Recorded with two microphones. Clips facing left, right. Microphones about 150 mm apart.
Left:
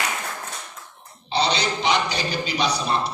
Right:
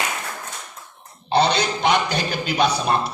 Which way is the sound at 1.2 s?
55° right (ahead or behind).